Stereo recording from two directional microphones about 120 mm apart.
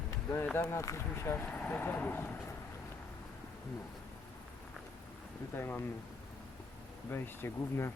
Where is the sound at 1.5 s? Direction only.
10° left (ahead or behind).